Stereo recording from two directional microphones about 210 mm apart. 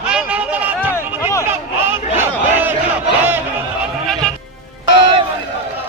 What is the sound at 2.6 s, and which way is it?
Battle cry, 10° right (ahead or behind).